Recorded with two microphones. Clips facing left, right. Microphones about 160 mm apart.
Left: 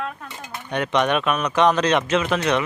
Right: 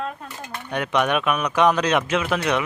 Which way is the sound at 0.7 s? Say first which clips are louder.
Left 1 dB; 5° right (ahead or behind).